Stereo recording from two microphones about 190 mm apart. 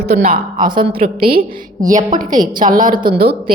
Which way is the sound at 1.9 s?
40° right (ahead or behind).